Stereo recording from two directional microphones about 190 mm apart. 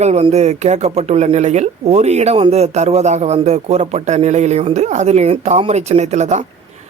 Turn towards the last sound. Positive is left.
turn(degrees=-35)  # may be behind; listen again after turning